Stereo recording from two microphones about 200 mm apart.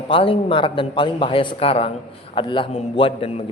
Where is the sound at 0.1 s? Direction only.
25° left (ahead or behind).